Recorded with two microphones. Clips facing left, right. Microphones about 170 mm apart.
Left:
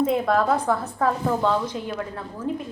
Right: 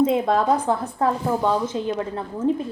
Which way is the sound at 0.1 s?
20° right (ahead or behind).